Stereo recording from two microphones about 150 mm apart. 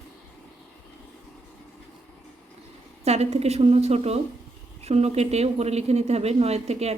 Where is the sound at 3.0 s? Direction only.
45° right (ahead or behind).